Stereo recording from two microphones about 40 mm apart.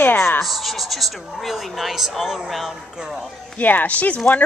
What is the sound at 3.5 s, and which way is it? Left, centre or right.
Speech, left.